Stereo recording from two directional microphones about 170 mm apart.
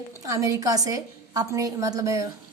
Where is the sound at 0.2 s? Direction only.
20° right (ahead or behind).